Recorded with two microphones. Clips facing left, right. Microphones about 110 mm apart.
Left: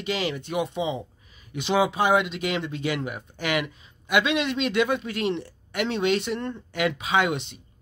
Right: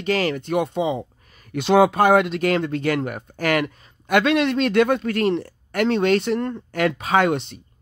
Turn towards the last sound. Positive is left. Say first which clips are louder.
# right 5 dB
turn(degrees=-45)  # may be behind; listen again after turning